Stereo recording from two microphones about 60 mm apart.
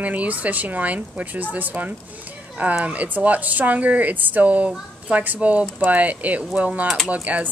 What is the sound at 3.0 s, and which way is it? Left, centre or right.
Speech, right.